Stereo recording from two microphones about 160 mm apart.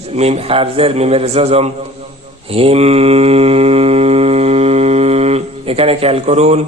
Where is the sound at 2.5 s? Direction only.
35° right (ahead or behind).